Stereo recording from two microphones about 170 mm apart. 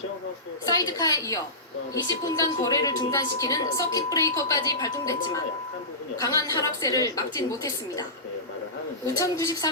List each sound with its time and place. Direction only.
0.6 s a woman's voice: 20° left (ahead or behind)
9.1 s a woman's voice: 20° left (ahead or behind)